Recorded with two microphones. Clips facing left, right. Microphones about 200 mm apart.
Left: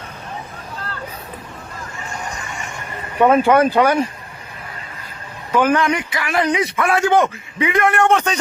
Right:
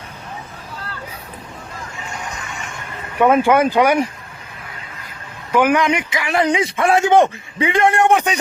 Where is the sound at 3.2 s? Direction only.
10° right (ahead or behind).